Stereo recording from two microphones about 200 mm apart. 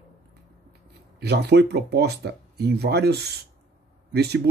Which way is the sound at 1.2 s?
55° right (ahead or behind).